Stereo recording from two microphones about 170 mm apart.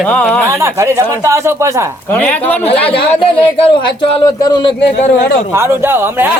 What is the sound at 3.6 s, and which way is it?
A woman's voice, 30° left (ahead or behind).